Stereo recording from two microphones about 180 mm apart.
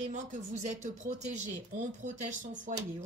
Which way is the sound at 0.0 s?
45° right (ahead or behind).